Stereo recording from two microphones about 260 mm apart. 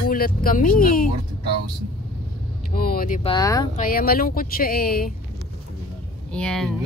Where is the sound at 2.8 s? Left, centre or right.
Left.